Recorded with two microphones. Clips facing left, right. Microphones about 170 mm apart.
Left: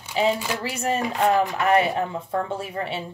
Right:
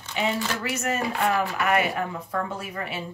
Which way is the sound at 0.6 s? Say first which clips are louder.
Left 5 dB; 30° left (ahead or behind).